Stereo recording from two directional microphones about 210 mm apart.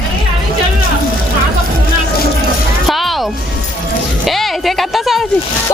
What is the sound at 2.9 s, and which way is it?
Music, centre (ahead or behind).